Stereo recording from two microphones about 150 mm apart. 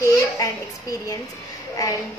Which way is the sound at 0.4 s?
25° left (ahead or behind).